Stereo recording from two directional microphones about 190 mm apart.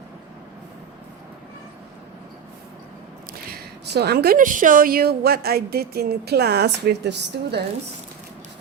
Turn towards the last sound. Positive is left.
turn(degrees=-65)  # may be behind; listen again after turning